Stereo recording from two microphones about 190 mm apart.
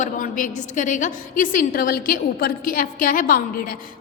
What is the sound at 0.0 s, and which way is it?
A woman's voice, 45° left (ahead or behind).